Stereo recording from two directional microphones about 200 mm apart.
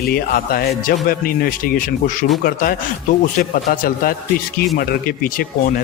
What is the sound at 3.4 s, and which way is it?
A man's voice, 45° left (ahead or behind).